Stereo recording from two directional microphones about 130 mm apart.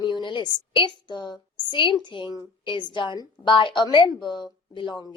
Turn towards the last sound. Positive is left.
turn(degrees=40)  # may be behind; listen again after turning